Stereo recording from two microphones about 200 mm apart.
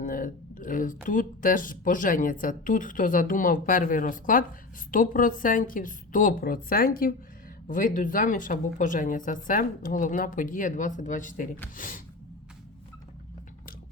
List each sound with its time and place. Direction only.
0.0 s a woman's voice: 40° left (ahead or behind)